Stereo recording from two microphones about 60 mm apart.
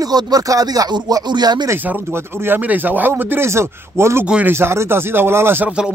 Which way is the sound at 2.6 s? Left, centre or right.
Right.